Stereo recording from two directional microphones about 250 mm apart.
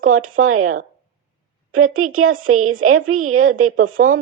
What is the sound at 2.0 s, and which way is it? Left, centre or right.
Speech, right.